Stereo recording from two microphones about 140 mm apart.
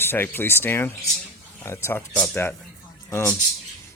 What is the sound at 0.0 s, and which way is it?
Speech, 15° left (ahead or behind).